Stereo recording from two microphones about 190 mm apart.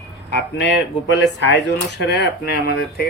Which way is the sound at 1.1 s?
65° left (ahead or behind).